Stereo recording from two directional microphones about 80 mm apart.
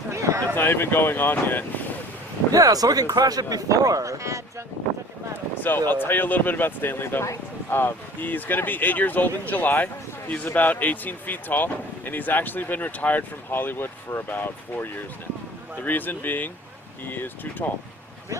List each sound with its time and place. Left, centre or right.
0.1 s a sound: right
0.5 s speech: left
2.5 s speech: right
5.9 s speech: left